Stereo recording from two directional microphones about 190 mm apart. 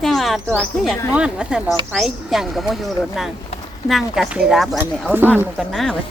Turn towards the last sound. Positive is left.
turn(degrees=0)  # may be behind; listen again after turning